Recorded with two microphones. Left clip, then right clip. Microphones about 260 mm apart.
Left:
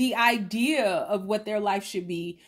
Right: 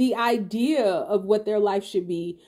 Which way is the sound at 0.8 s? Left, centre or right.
Left.